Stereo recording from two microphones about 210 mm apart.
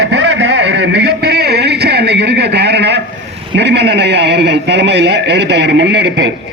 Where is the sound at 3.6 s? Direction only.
55° right (ahead or behind).